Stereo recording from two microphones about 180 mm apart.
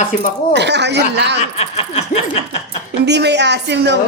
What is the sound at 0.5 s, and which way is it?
Speech, 70° right (ahead or behind).